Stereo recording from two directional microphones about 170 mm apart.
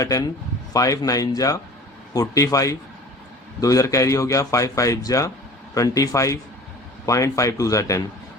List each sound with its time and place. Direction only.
0.0 s speech: 20° left (ahead or behind)